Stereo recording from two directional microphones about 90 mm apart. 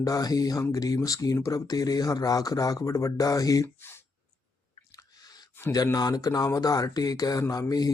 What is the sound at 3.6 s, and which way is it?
Speech, 25° left (ahead or behind).